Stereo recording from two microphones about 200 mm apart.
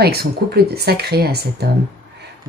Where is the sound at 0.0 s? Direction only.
50° right (ahead or behind).